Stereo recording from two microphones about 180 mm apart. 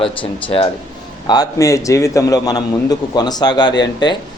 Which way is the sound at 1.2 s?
20° left (ahead or behind).